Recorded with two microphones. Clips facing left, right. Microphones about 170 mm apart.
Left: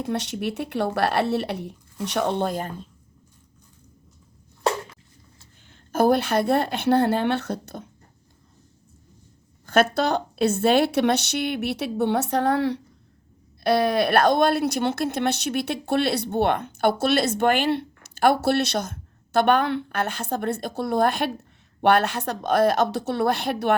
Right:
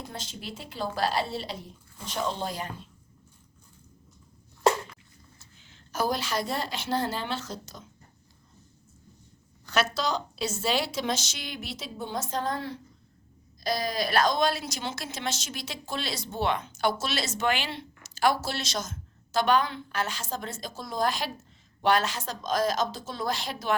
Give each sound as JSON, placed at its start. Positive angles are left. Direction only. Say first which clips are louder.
{"t": 0.0, "sound": "speech", "louder": "left 13 dB", "side_deg": 70}
{"t": 5.9, "sound": "speech", "louder": "left 9 dB", "side_deg": 55}
{"t": 9.6, "sound": "speech", "louder": "left 7 dB", "side_deg": 55}
{"t": 13.7, "sound": "speech", "louder": "left 9 dB", "side_deg": 65}